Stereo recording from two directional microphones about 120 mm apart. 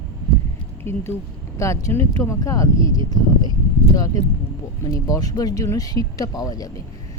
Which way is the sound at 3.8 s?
30° left (ahead or behind).